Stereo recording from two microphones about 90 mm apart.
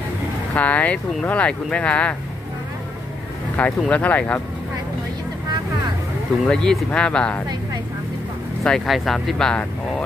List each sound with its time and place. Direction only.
0.6 s speech: 15° left (ahead or behind)
3.6 s speech: 15° left (ahead or behind)
6.4 s speech: 5° left (ahead or behind)
8.6 s speech: centre (ahead or behind)